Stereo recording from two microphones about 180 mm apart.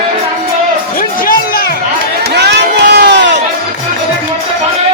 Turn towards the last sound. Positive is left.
turn(degrees=-75)  # may be behind; listen again after turning